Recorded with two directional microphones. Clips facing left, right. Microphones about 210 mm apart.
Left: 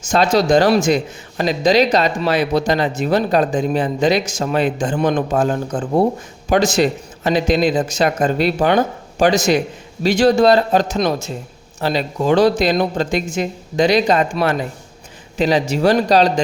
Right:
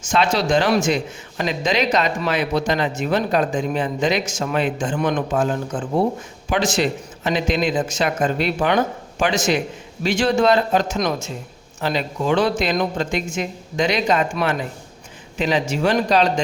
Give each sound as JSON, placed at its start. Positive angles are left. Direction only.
{"t": 0.0, "sound": "speech", "side_deg": 40}